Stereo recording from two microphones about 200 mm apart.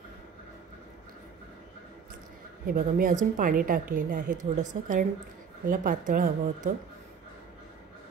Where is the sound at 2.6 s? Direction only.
45° right (ahead or behind).